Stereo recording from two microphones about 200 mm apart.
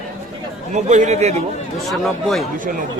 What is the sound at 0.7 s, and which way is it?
Speech, 35° right (ahead or behind).